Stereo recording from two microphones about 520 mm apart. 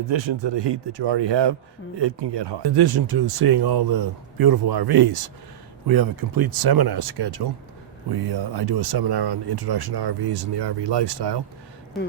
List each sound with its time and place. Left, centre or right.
0.1 s speech: right